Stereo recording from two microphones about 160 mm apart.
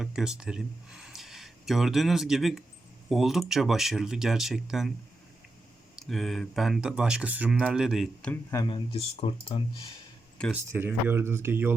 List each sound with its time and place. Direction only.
0.0 s speech: 5° right (ahead or behind)
6.0 s speech: centre (ahead or behind)
8.3 s speech: 20° left (ahead or behind)
8.7 s speech: 35° left (ahead or behind)
10.5 s speech: 15° right (ahead or behind)